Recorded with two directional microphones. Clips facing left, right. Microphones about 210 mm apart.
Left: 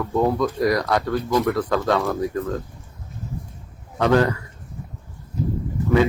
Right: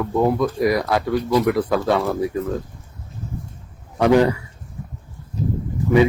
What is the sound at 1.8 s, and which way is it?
Speech, 10° right (ahead or behind).